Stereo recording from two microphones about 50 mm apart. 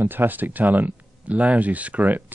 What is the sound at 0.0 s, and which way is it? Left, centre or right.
Speech, right.